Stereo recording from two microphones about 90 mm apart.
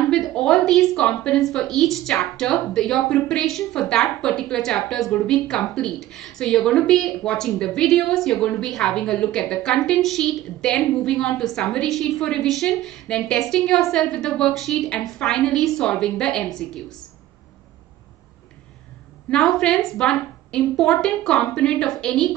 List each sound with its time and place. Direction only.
0.0 s a sound: centre (ahead or behind)
0.3 s a woman's voice: 5° left (ahead or behind)
19.3 s a woman's voice: 5° left (ahead or behind)